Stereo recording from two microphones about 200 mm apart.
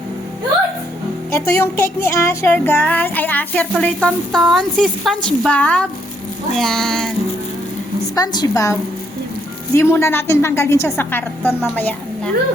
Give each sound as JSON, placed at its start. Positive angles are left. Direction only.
{"t": 1.3, "sound": "music", "side_deg": 15}
{"t": 6.5, "sound": "speech", "side_deg": 0}
{"t": 8.1, "sound": "music", "side_deg": 20}